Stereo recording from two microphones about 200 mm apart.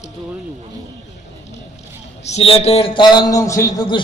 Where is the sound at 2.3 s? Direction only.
30° left (ahead or behind).